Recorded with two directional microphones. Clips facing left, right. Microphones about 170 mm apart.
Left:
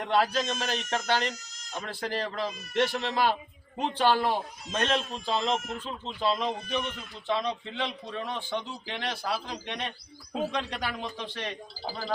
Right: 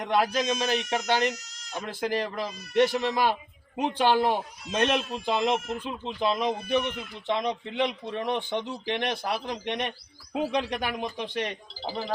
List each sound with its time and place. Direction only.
0.0 s speech: 15° right (ahead or behind)